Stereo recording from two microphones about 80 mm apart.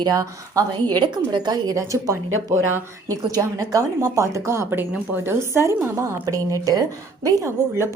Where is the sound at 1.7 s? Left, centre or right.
Right.